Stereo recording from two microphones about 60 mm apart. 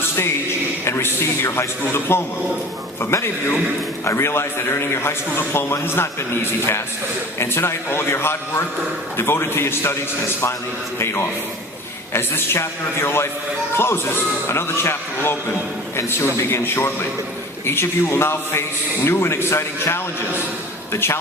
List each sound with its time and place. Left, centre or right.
0.9 s a man's voice: left